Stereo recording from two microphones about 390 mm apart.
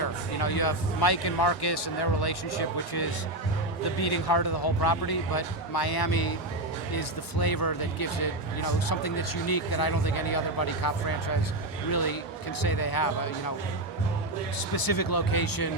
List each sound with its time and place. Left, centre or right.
0.0 s speech: left
14.7 s speech: left